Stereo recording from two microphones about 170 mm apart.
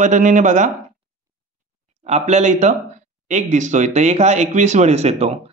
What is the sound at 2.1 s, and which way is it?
Speech, 40° right (ahead or behind).